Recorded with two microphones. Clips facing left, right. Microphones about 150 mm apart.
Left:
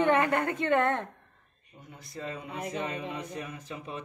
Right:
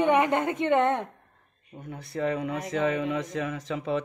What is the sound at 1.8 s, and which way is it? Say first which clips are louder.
Speech: right 10 dB; 60° right (ahead or behind).